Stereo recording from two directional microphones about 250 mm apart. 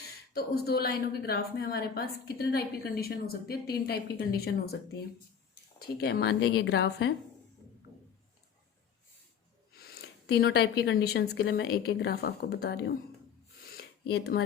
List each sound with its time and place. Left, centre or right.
0.3 s a woman's voice: left
5.8 s a woman's voice: left
10.2 s a woman's voice: left
13.7 s a sound: left